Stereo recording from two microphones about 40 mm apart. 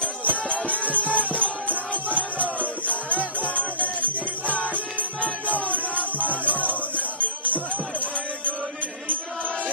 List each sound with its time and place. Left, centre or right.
0.5 s music: left
3.3 s music: left
5.7 s music: left